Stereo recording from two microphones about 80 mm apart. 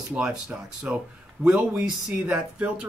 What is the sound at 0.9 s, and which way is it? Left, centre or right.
Speech, centre.